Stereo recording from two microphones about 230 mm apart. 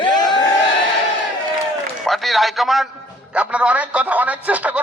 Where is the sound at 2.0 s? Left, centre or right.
Centre.